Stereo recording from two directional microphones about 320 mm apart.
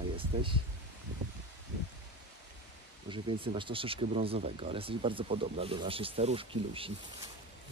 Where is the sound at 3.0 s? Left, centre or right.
Centre.